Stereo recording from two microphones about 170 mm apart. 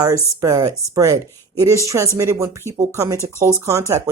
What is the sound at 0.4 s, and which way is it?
Speech, 20° right (ahead or behind).